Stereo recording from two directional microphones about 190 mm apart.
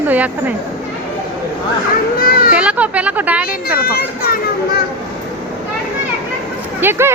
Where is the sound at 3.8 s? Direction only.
55° left (ahead or behind).